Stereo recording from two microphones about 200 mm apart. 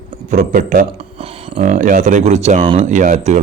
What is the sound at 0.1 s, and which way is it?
Speech, 40° right (ahead or behind).